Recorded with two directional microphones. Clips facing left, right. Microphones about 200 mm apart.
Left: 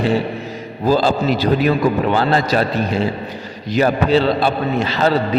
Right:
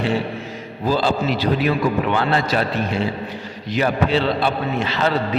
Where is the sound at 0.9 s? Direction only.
40° left (ahead or behind).